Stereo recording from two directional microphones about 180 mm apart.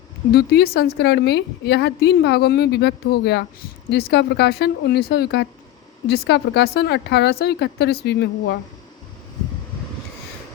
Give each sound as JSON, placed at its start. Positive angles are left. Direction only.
{"t": 0.3, "sound": "a woman's voice", "side_deg": 60}